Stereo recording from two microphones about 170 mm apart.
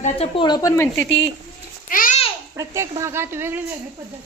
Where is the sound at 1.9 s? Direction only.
55° left (ahead or behind).